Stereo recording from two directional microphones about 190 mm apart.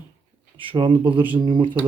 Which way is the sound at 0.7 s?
25° right (ahead or behind).